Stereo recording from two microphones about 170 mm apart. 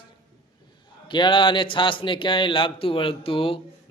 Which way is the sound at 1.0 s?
25° left (ahead or behind).